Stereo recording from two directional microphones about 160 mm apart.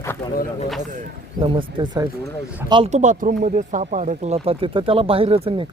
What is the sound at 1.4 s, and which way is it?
Speech, 35° right (ahead or behind).